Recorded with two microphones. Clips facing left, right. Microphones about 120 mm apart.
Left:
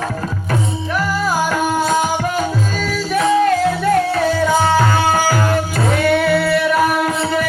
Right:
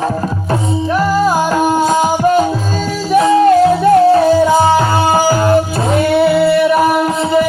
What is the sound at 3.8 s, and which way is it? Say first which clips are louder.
Music: right 7 dB; 20° right (ahead or behind).